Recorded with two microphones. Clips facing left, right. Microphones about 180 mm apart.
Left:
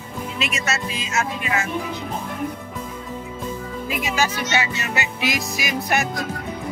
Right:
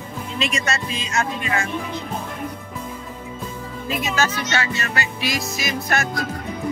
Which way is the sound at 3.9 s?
10° left (ahead or behind).